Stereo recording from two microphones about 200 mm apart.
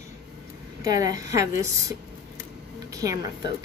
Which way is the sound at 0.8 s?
20° right (ahead or behind).